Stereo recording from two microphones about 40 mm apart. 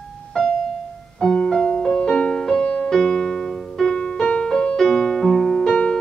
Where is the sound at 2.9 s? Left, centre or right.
Centre.